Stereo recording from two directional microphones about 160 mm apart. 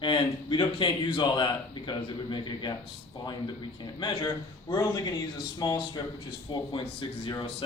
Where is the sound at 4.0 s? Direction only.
30° left (ahead or behind).